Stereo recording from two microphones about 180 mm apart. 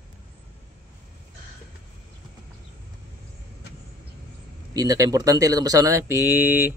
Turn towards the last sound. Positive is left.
turn(degrees=-10)  # may be behind; listen again after turning